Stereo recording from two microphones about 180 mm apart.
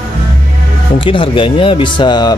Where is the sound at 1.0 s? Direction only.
30° left (ahead or behind).